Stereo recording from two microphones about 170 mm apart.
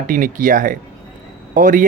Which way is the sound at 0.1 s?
50° right (ahead or behind).